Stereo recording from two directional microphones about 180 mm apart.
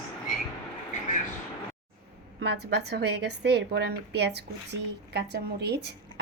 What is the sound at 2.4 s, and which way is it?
A woman's voice, 70° right (ahead or behind).